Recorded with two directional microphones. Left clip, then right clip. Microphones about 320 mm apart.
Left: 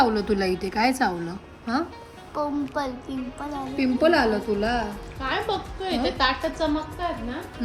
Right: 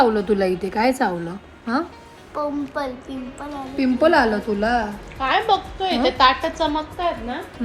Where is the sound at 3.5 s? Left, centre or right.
Centre.